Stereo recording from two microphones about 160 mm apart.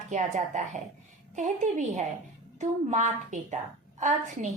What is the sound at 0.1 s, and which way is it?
A woman's voice, 50° right (ahead or behind).